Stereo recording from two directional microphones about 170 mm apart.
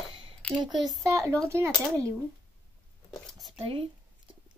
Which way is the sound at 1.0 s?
20° right (ahead or behind).